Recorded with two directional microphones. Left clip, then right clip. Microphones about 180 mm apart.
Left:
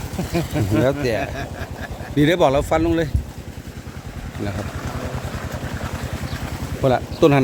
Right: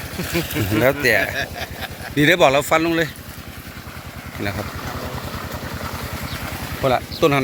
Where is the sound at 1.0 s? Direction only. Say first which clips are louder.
Right 5 dB; centre (ahead or behind).